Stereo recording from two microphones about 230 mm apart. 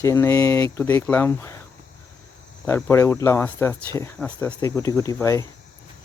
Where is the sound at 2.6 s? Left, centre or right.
Centre.